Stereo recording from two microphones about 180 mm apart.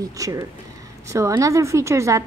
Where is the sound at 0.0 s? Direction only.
20° right (ahead or behind).